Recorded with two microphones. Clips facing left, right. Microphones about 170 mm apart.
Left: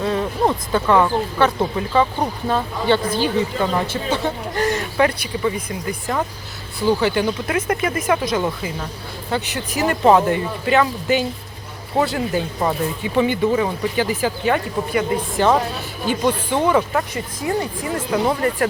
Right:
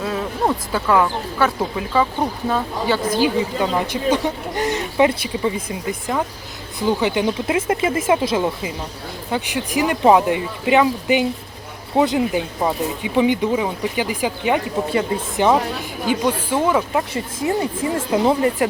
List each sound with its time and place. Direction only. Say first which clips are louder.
0.0 s speech: left 2 dB; 5° right (ahead or behind); by 6.0 s 25° right (ahead or behind)
7.0 s speech: even; 15° right (ahead or behind)
9.3 s speech: right 2 dB; 10° right (ahead or behind)
14.8 s speech: left 3 dB; 30° right (ahead or behind)
15.4 s speech: right 1 dB; 15° right (ahead or behind)
17.4 s speech: right 2 dB; 25° right (ahead or behind)